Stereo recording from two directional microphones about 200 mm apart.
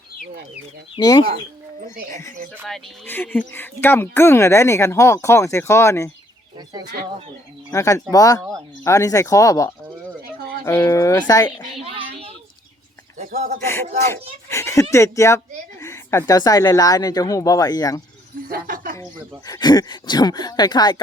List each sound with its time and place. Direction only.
0.9 s speech: 20° left (ahead or behind)
7.7 s speech: 15° left (ahead or behind)
11.8 s a sound: 30° right (ahead or behind)
13.6 s speech: 10° left (ahead or behind)
18.4 s a sound: 45° right (ahead or behind)
19.5 s speech: 20° left (ahead or behind)